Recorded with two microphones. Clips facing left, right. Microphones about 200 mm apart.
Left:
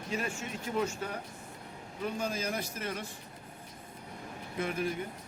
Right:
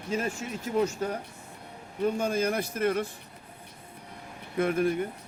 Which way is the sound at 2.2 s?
55° right (ahead or behind).